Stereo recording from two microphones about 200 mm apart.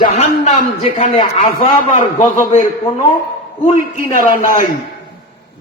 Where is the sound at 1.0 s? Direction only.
35° left (ahead or behind).